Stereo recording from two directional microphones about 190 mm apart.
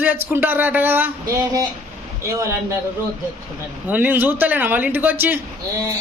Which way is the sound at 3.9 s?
10° right (ahead or behind).